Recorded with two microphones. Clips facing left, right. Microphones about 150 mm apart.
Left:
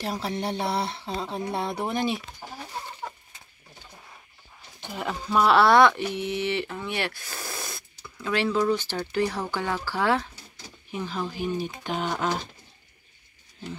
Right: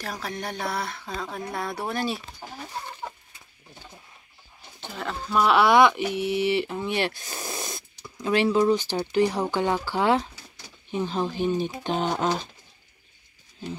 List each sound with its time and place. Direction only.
0.0 s speech: 25° left (ahead or behind)
4.7 s speech: 10° left (ahead or behind); by 12.3 s 25° right (ahead or behind)